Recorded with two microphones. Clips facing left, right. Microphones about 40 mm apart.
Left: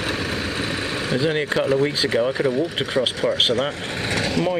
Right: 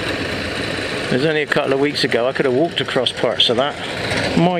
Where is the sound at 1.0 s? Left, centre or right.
Right.